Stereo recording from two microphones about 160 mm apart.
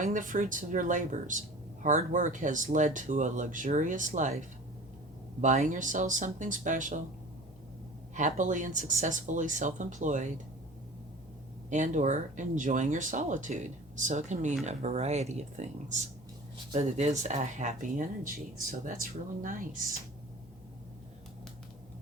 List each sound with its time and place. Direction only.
0.0 s speech: 55° right (ahead or behind)
8.1 s speech: 50° right (ahead or behind)
11.7 s speech: 50° right (ahead or behind)